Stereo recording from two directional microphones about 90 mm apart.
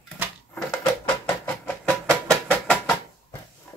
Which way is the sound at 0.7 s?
20° left (ahead or behind).